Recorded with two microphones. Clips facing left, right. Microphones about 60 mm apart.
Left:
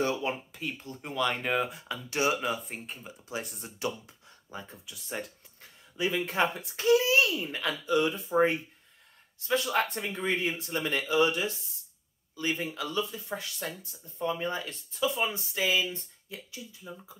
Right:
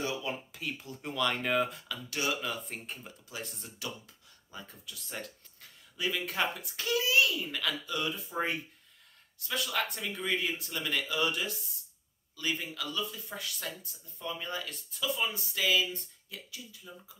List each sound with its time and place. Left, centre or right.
0.5 s speech: centre
1.9 s speech: left
2.5 s speech: centre
3.3 s speech: left
9.4 s speech: left